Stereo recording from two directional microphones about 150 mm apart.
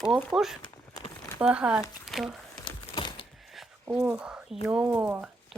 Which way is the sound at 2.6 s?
30° left (ahead or behind).